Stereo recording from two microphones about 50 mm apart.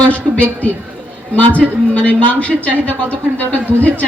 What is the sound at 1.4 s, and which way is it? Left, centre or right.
A man's voice, left.